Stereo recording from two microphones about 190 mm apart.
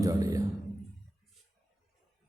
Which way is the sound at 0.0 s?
20° right (ahead or behind).